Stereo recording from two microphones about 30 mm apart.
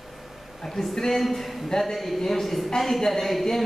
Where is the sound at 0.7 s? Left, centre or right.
Centre.